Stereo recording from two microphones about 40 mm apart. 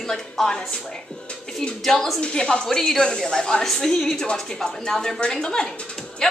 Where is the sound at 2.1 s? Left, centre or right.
Left.